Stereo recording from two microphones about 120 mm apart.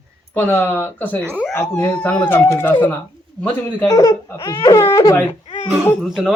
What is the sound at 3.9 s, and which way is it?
Speech, 30° left (ahead or behind).